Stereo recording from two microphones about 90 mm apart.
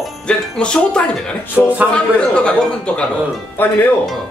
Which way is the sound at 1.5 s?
20° right (ahead or behind).